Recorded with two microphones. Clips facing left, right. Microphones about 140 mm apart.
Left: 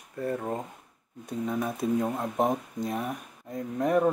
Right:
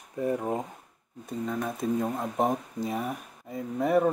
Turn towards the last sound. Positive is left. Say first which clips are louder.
# even
turn(degrees=0)  # may be behind; listen again after turning